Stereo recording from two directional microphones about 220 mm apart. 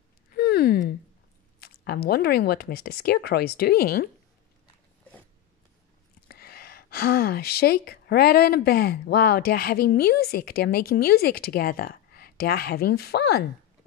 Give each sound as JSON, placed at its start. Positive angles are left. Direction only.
{"t": 0.3, "sound": "a sound", "side_deg": 45}
{"t": 1.6, "sound": "speech", "side_deg": 45}
{"t": 6.2, "sound": "speech", "side_deg": 45}